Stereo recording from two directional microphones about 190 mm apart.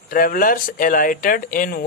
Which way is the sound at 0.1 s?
45° left (ahead or behind).